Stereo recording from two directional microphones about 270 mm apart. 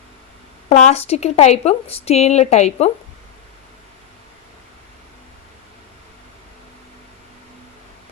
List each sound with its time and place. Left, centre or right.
0.7 s a woman's voice: left